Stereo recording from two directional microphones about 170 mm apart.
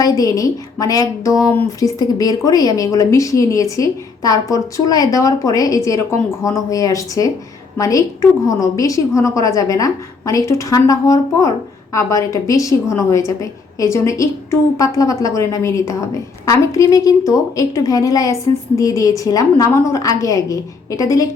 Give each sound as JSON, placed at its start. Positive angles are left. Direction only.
{"t": 0.0, "sound": "a woman's voice", "side_deg": 20}